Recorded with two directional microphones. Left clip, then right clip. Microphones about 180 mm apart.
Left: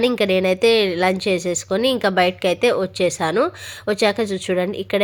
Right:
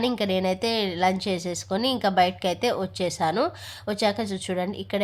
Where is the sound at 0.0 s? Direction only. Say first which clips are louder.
Left 7 dB; 15° left (ahead or behind).